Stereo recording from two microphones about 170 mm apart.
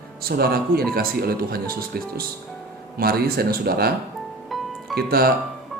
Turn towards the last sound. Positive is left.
turn(degrees=-65)  # may be behind; listen again after turning